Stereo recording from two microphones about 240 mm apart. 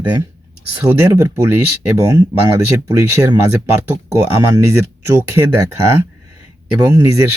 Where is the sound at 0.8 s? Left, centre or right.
Centre.